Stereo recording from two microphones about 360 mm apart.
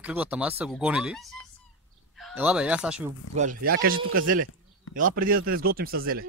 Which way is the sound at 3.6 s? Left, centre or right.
Right.